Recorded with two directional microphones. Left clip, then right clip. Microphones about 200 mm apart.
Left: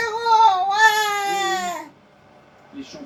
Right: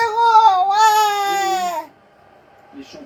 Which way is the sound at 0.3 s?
15° right (ahead or behind).